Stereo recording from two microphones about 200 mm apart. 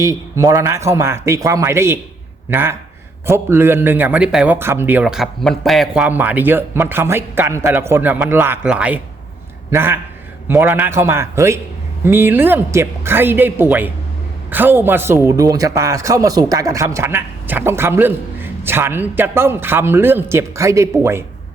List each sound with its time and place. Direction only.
0.0 s a man's voice: 15° right (ahead or behind)